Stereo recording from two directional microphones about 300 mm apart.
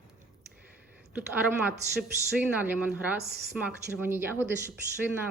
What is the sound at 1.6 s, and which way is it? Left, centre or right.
Speech, centre.